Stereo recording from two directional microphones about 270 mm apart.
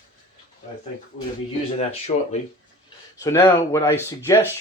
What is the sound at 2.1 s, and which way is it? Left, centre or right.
Speech, left.